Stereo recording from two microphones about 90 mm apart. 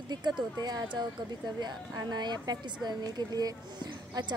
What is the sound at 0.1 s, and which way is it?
A woman's voice, 55° right (ahead or behind).